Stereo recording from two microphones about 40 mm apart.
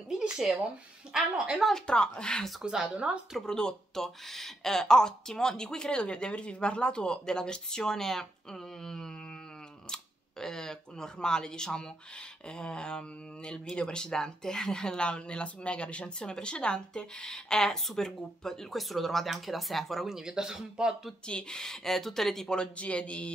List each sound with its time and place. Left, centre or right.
1.1 s speech: centre
1.9 s speech: left
2.6 s a woman's voice: right
3.4 s speech: centre
10.4 s speech: centre
20.1 s speech: centre
21.3 s speech: left
22.6 s speech: left